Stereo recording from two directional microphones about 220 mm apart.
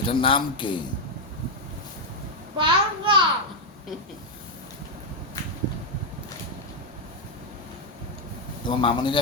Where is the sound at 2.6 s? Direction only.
20° right (ahead or behind).